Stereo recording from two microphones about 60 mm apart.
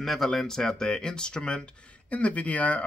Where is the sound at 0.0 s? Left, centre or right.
Centre.